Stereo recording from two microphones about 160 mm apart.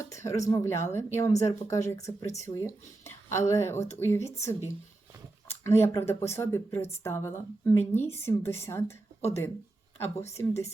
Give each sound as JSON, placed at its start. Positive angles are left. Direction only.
{"t": 0.1, "sound": "speech", "side_deg": 20}